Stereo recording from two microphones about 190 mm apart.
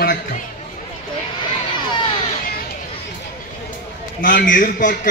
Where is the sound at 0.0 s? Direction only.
45° left (ahead or behind).